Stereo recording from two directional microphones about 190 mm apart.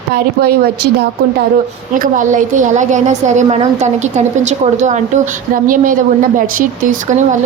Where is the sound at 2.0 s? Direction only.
45° right (ahead or behind).